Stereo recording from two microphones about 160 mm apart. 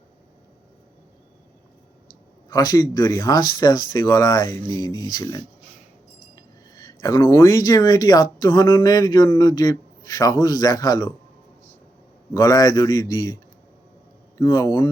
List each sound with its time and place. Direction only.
2.5 s speech: 25° left (ahead or behind)
12.3 s speech: 20° left (ahead or behind)
14.3 s speech: 25° left (ahead or behind)